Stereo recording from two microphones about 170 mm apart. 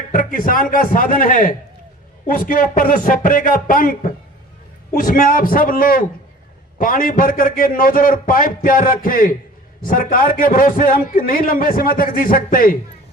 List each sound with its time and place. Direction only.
0.1 s a man's voice: 55° left (ahead or behind)